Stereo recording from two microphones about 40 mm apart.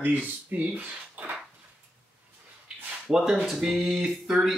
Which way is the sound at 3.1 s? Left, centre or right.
Centre.